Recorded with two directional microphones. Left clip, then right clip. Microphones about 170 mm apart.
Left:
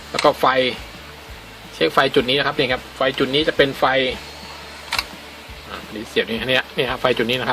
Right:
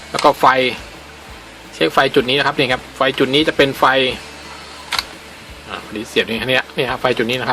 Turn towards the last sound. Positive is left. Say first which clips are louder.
# right 2 dB
turn(degrees=-5)  # may be behind; listen again after turning